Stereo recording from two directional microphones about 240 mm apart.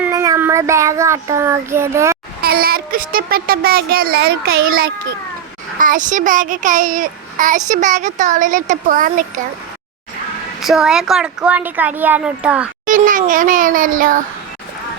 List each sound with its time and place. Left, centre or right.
0.0 s child singing: centre
2.4 s a child's voice: right
5.8 s a child's voice: right
10.6 s speech: centre
12.8 s a child's voice: right